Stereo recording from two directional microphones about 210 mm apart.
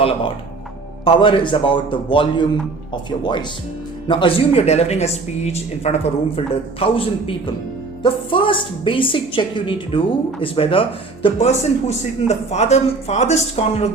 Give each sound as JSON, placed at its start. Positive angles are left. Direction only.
{"t": 1.0, "sound": "speech", "side_deg": 25}